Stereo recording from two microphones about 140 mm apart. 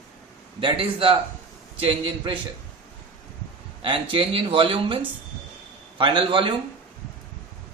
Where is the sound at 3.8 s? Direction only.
40° right (ahead or behind).